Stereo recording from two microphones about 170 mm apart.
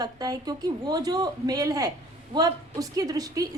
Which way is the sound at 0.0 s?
20° right (ahead or behind).